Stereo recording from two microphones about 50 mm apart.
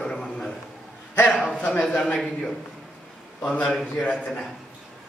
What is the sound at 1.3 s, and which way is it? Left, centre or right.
Speech, centre.